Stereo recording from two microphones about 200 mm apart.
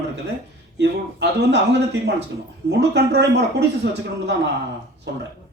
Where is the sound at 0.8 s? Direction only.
60° right (ahead or behind).